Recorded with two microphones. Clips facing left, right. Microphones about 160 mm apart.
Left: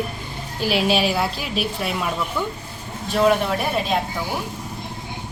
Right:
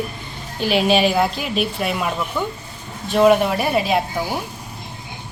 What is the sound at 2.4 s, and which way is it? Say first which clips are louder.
Speech: right 2 dB; 20° right (ahead or behind).